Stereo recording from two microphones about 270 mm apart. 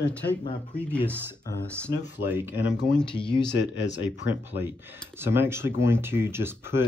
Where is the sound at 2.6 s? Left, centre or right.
Left.